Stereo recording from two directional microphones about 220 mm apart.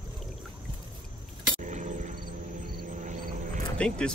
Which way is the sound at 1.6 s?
35° right (ahead or behind).